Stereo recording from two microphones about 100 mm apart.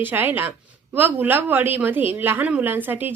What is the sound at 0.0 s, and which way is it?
A woman's voice, 20° right (ahead or behind).